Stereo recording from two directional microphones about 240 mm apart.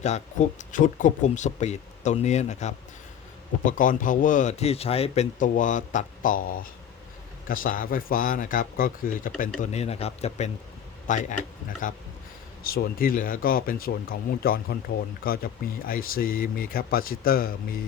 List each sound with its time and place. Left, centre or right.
0.0 s speech: left